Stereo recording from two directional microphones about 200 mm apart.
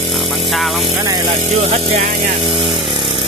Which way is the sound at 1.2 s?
30° right (ahead or behind).